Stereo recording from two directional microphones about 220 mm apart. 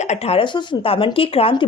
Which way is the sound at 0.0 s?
30° left (ahead or behind).